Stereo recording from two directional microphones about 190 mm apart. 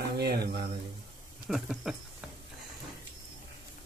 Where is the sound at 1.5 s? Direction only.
Centre (ahead or behind).